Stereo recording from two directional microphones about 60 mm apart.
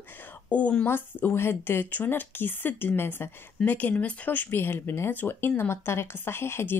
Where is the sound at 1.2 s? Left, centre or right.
Left.